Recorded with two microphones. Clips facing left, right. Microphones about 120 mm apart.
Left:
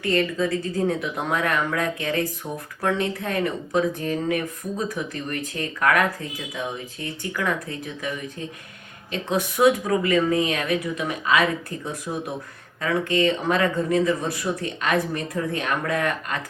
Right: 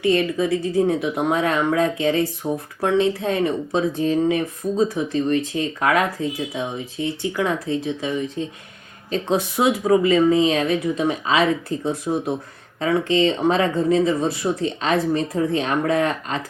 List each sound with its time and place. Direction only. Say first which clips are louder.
0.0 s speech: right 4 dB; 20° right (ahead or behind)
0.4 s speech: right 4 dB; 5° right (ahead or behind)
1.0 s a woman's voice: right 5 dB; 20° right (ahead or behind)
9.6 s speech: right 3 dB; 20° right (ahead or behind)